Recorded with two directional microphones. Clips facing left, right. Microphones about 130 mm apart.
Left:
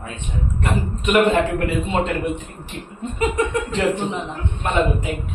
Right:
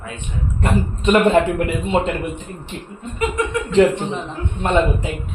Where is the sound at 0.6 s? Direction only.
25° right (ahead or behind).